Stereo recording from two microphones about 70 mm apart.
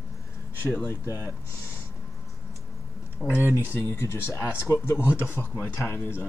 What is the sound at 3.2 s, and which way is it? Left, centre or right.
Speech, centre.